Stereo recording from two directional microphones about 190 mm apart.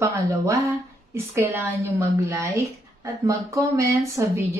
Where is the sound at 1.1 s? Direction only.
15° right (ahead or behind).